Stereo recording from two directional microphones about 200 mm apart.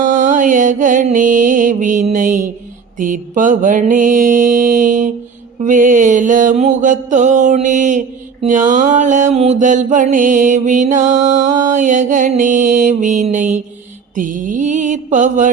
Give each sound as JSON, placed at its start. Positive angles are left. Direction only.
{"t": 0.0, "sound": "mantra", "side_deg": -40}